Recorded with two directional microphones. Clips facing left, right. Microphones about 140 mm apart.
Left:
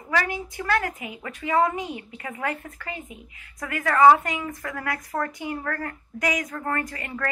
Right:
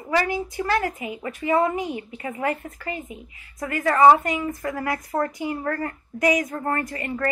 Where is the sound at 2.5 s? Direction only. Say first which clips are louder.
Right 4 dB; 40° right (ahead or behind).